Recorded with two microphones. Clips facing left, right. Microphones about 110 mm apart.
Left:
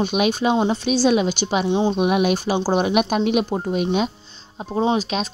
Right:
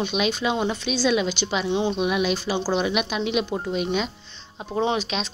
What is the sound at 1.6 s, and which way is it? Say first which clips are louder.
Speech: left 4 dB; 35° left (ahead or behind).